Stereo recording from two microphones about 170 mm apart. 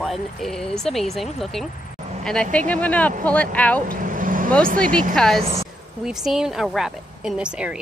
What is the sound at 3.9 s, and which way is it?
Vehicle, 55° right (ahead or behind).